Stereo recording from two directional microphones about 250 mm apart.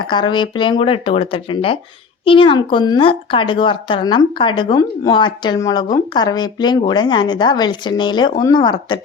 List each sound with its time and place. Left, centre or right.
0.0 s speech: centre